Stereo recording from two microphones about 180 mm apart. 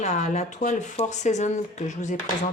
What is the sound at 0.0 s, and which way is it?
Speech, 40° left (ahead or behind).